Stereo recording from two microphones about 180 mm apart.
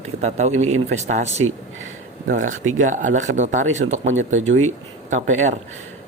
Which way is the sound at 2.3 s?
45° right (ahead or behind).